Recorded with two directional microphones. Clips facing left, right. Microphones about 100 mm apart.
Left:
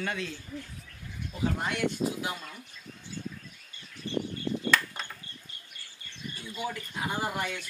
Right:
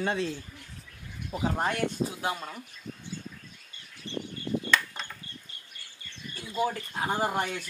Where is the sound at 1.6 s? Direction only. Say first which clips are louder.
Right 2 dB; 40° right (ahead or behind).